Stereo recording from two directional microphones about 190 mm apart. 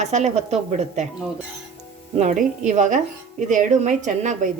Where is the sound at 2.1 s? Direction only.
40° right (ahead or behind).